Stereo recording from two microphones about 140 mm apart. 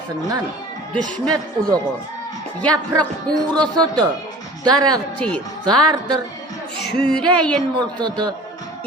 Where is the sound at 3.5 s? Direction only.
30° right (ahead or behind).